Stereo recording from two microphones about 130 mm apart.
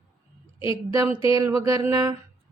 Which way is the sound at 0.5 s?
40° left (ahead or behind).